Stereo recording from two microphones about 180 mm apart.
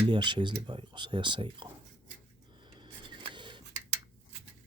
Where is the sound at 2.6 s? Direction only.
25° right (ahead or behind).